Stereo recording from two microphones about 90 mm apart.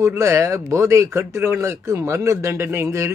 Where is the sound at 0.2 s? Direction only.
35° right (ahead or behind).